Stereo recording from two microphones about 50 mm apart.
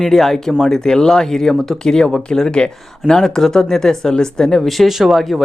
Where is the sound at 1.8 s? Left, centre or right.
Centre.